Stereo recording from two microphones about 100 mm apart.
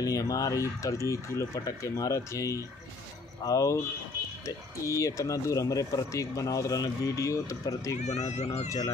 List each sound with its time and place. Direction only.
0.0 s speech: 35° left (ahead or behind)
4.8 s speech: 30° left (ahead or behind)
8.0 s speech: 90° left